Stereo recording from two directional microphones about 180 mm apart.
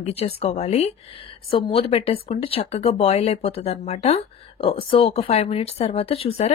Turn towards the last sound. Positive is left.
turn(degrees=35)  # may be behind; listen again after turning